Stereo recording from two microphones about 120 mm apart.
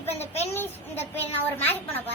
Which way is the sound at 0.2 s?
20° left (ahead or behind).